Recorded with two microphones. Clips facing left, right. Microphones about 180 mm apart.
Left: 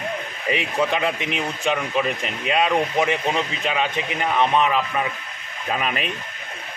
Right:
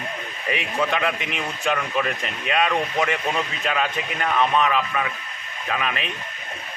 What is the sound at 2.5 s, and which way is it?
Speech, 30° left (ahead or behind).